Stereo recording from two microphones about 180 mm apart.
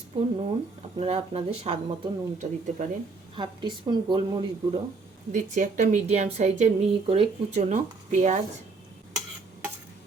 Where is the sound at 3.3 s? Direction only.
25° right (ahead or behind).